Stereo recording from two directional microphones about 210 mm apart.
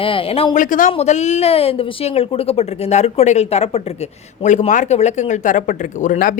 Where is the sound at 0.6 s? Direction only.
40° left (ahead or behind).